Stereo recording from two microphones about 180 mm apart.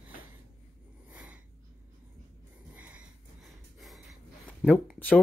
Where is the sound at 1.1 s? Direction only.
10° right (ahead or behind).